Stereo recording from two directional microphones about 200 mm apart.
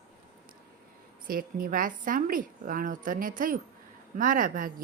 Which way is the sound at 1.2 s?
45° right (ahead or behind).